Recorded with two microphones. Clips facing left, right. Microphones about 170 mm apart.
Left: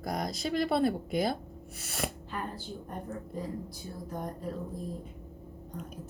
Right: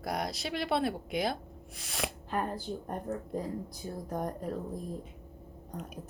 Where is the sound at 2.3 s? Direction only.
45° right (ahead or behind).